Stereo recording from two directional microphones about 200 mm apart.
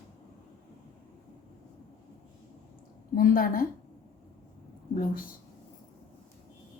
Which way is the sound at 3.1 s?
45° left (ahead or behind).